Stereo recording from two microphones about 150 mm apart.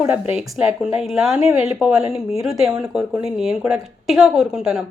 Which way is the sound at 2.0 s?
40° left (ahead or behind).